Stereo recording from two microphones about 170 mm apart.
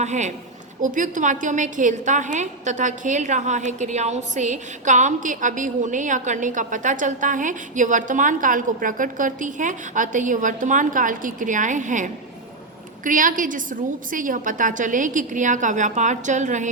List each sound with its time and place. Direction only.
0.0 s a woman's voice: 45° right (ahead or behind)